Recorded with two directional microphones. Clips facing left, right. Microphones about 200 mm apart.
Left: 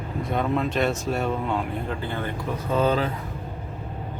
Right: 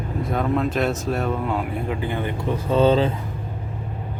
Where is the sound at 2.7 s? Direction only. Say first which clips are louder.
Right 5 dB; 25° right (ahead or behind).